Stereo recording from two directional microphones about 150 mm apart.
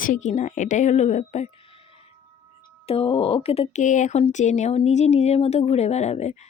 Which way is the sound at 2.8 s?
40° left (ahead or behind).